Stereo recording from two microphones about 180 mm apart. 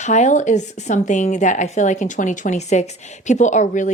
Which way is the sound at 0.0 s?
40° left (ahead or behind).